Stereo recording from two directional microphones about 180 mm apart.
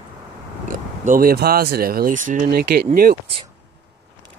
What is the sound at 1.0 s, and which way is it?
Speech, 50° right (ahead or behind).